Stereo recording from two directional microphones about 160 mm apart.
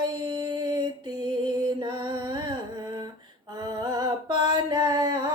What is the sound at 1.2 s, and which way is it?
Music, 30° right (ahead or behind).